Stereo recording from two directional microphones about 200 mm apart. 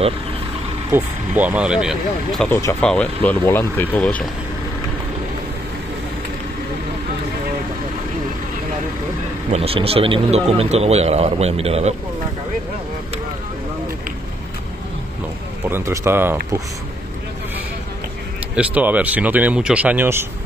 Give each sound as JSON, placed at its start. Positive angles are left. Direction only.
{"t": 0.8, "sound": "speech", "side_deg": -10}
{"t": 9.5, "sound": "a man's voice", "side_deg": -30}
{"t": 15.6, "sound": "speech", "side_deg": -15}
{"t": 18.5, "sound": "speech", "side_deg": -5}